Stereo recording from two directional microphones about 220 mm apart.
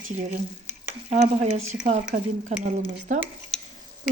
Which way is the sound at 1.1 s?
30° right (ahead or behind).